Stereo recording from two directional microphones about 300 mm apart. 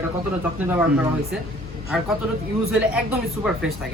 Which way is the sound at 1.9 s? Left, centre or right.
Centre.